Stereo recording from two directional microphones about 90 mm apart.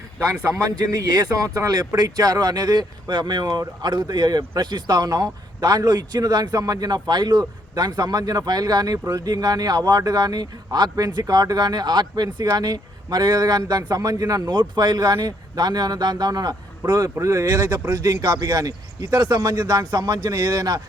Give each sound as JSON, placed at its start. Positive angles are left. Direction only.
{"t": 0.3, "sound": "a man's voice", "side_deg": -35}